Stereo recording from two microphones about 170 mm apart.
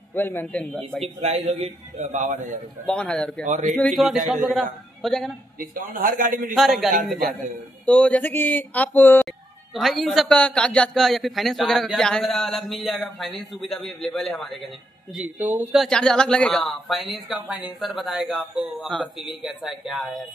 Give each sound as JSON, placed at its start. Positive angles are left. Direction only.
{"t": 0.1, "sound": "speech", "side_deg": 10}
{"t": 1.0, "sound": "a man's voice", "side_deg": -40}
{"t": 2.9, "sound": "a man's voice", "side_deg": 5}
{"t": 3.4, "sound": "a man's voice", "side_deg": -45}
{"t": 3.8, "sound": "a man's voice", "side_deg": 0}
{"t": 5.6, "sound": "a man's voice", "side_deg": -55}
{"t": 6.5, "sound": "a man's voice", "side_deg": 0}
{"t": 8.0, "sound": "speech", "side_deg": 10}
{"t": 9.8, "sound": "a man's voice", "side_deg": 0}
{"t": 15.1, "sound": "speech", "side_deg": -10}
{"t": 15.8, "sound": "a man's voice", "side_deg": 5}